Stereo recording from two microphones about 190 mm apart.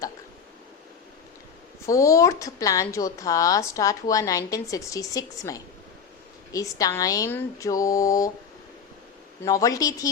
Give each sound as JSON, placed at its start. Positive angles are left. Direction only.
{"t": 1.9, "sound": "speech", "side_deg": 15}
{"t": 9.4, "sound": "speech", "side_deg": 15}